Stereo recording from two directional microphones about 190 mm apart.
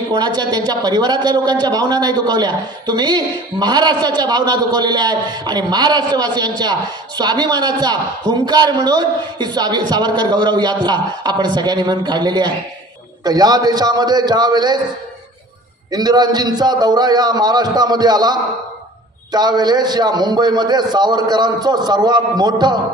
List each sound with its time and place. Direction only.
0.1 s a man's voice: 20° right (ahead or behind)
15.9 s a man's voice: 20° right (ahead or behind)